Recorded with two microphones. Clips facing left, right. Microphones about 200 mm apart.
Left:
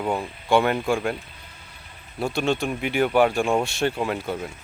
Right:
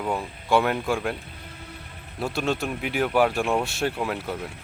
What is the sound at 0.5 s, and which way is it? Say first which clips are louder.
Speech: left 2 dB; centre (ahead or behind).